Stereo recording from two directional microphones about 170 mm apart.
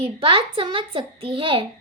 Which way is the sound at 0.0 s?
30° right (ahead or behind).